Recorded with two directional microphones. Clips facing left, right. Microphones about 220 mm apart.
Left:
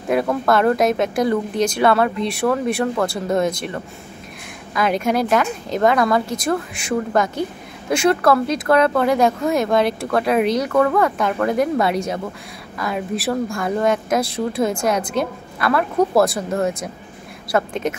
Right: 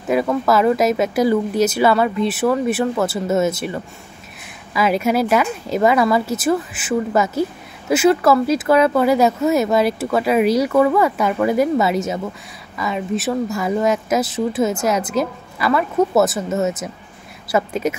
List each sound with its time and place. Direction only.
0.1 s speech: centre (ahead or behind)